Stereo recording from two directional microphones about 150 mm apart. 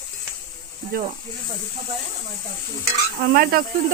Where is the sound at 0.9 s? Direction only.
75° right (ahead or behind).